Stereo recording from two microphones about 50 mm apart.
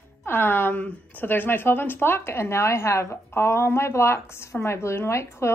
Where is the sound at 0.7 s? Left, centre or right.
Left.